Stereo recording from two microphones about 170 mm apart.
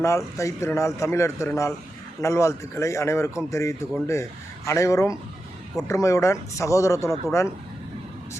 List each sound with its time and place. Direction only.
0.0 s a man's voice: 15° left (ahead or behind)